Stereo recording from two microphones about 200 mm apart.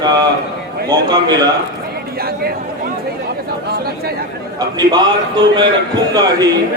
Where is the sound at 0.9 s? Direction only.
20° right (ahead or behind).